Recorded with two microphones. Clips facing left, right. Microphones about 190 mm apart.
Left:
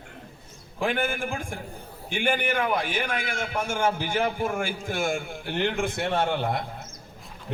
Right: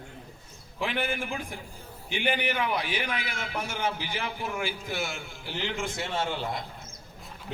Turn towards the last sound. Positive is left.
turn(degrees=60)  # may be behind; listen again after turning